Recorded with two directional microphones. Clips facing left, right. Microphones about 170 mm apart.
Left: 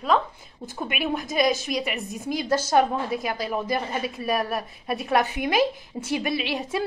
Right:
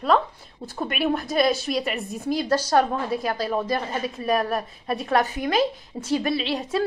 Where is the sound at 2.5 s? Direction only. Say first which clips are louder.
Left 1 dB; 20° left (ahead or behind).